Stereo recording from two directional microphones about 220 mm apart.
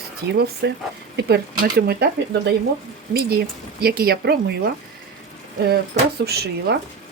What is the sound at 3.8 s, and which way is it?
Speech, 45° right (ahead or behind).